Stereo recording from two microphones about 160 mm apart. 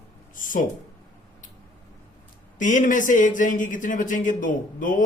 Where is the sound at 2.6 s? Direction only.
50° left (ahead or behind).